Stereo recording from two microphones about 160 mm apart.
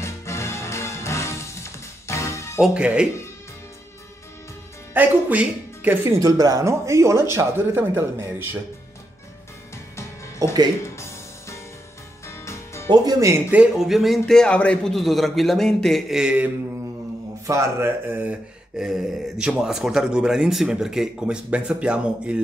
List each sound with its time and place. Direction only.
0.0 s music: 15° left (ahead or behind)
2.6 s speech: 5° right (ahead or behind)
4.9 s speech: 10° right (ahead or behind)
10.4 s speech: 20° right (ahead or behind)
10.8 s music: 15° left (ahead or behind)
12.9 s speech: 20° right (ahead or behind)